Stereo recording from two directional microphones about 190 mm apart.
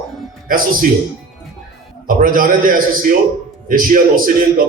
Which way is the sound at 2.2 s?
45° right (ahead or behind).